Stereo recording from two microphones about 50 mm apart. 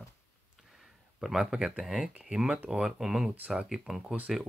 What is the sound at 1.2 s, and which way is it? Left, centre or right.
Speech, centre.